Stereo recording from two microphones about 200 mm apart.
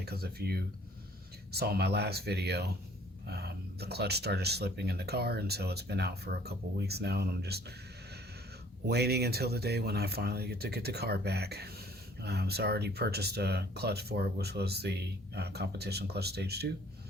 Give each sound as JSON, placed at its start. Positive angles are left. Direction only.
{"t": 0.0, "sound": "speech", "side_deg": -50}
{"t": 8.9, "sound": "speech", "side_deg": -55}